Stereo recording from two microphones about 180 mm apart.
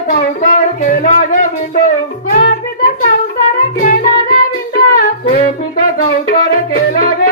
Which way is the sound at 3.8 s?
50° left (ahead or behind).